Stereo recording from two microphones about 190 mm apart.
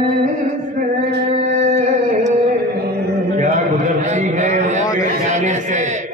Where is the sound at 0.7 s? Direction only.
40° right (ahead or behind).